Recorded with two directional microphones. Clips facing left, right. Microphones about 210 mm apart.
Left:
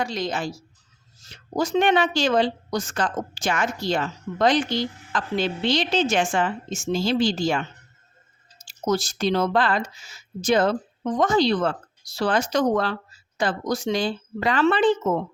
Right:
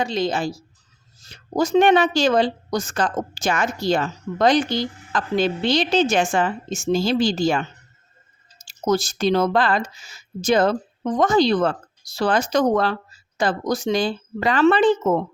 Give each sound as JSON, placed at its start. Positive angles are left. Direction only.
{"t": 0.0, "sound": "a woman's voice", "side_deg": -25}
{"t": 1.5, "sound": "a woman's voice", "side_deg": -45}
{"t": 8.6, "sound": "speech", "side_deg": -45}